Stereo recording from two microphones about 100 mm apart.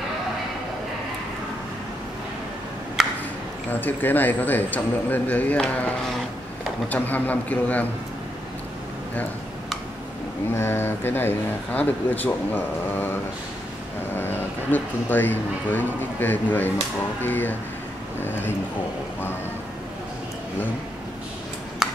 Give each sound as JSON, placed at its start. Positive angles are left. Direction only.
{"t": 3.0, "sound": "a sound", "side_deg": -5}
{"t": 3.8, "sound": "speech", "side_deg": 20}
{"t": 6.9, "sound": "speech", "side_deg": 15}
{"t": 10.5, "sound": "speech", "side_deg": 25}